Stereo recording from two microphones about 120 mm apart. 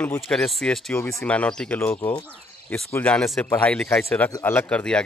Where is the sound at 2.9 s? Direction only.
10° left (ahead or behind).